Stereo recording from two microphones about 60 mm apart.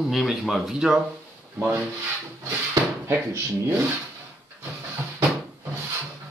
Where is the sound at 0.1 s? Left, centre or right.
Centre.